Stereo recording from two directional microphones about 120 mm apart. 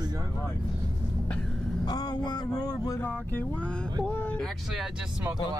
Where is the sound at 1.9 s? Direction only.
35° left (ahead or behind).